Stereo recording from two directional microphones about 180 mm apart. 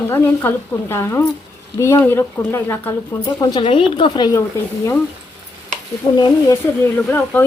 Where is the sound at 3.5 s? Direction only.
30° left (ahead or behind).